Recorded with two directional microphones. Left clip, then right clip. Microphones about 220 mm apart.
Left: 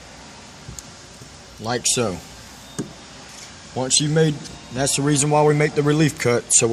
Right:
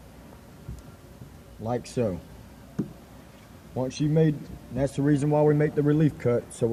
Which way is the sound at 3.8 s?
25° left (ahead or behind).